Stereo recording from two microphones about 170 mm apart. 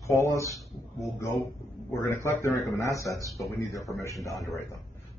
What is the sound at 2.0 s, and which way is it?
A man's voice, 15° left (ahead or behind).